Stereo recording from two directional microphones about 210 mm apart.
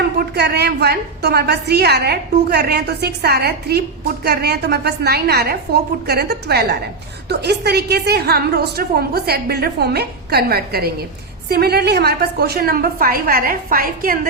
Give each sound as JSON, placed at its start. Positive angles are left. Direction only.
{"t": 0.2, "sound": "a woman's voice", "side_deg": -50}